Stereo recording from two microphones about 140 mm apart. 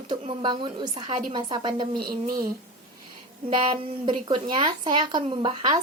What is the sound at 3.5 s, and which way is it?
Speech, 35° right (ahead or behind).